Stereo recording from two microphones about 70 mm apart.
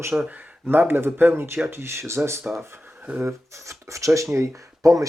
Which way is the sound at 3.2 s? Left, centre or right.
Right.